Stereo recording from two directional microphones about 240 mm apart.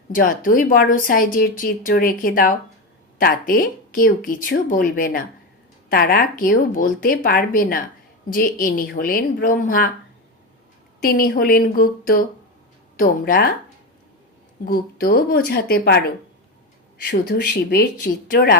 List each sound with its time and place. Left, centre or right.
0.1 s a woman's voice: left
11.0 s a woman's voice: left
14.6 s a woman's voice: left